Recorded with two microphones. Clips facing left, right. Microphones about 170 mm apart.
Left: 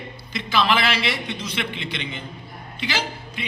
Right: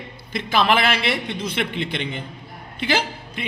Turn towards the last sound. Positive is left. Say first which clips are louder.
# right 3 dB
turn(degrees=-50)  # may be behind; listen again after turning